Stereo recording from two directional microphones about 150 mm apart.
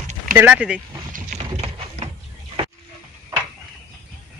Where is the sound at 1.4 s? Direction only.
45° right (ahead or behind).